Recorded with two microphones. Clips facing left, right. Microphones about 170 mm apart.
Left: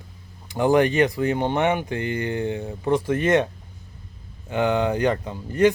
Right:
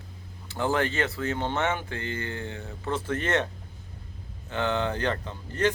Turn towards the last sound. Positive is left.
turn(degrees=10)  # may be behind; listen again after turning